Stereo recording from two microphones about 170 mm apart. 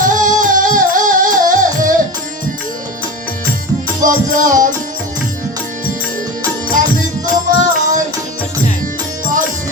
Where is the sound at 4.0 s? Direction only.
50° right (ahead or behind).